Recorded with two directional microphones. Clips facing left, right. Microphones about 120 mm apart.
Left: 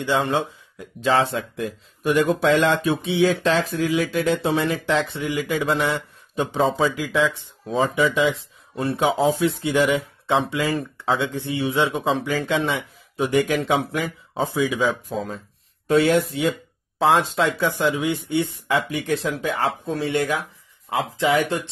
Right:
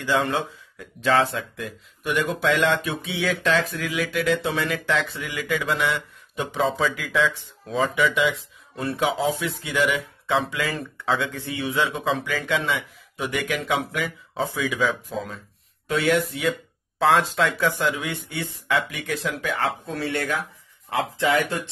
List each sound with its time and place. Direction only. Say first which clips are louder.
0.0 s speech: left 2 dB; 20° left (ahead or behind)
7.7 s speech: left 2 dB; 35° left (ahead or behind)
14.9 s speech: left 3 dB; 35° left (ahead or behind); by 21.6 s 20° left (ahead or behind)